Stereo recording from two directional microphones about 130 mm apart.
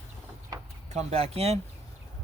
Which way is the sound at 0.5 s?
30° right (ahead or behind).